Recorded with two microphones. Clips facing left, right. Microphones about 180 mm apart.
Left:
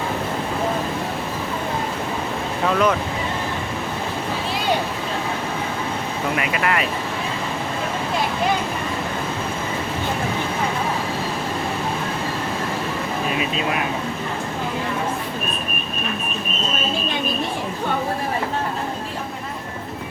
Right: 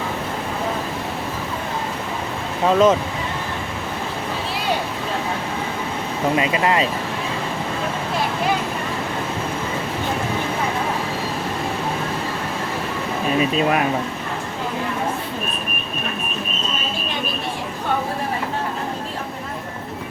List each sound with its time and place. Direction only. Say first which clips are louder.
2.6 s speech: right 5 dB; 25° right (ahead or behind)
6.3 s speech: right 3 dB; 25° right (ahead or behind)